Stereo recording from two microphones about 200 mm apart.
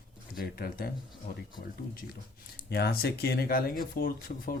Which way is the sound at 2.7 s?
50° left (ahead or behind).